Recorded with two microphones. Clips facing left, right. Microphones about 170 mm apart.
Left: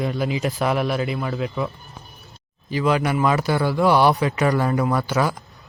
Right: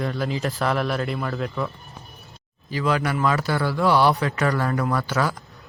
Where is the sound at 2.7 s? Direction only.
20° left (ahead or behind).